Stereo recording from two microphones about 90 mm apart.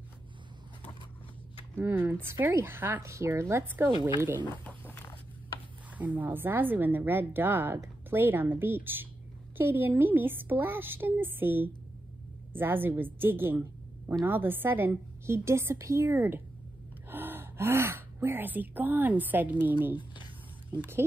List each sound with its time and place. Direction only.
1.9 s a woman's voice: 25° right (ahead or behind)
4.6 s wild animals: 25° left (ahead or behind)
5.9 s a woman's voice: 20° right (ahead or behind)
20.7 s a woman's voice: 20° right (ahead or behind)